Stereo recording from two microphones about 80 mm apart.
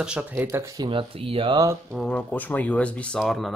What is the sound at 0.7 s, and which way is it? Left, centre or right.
Speech, right.